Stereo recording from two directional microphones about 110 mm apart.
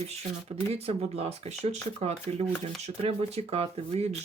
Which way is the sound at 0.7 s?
70° right (ahead or behind).